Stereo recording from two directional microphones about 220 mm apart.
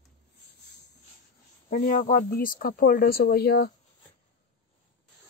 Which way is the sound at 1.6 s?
35° left (ahead or behind).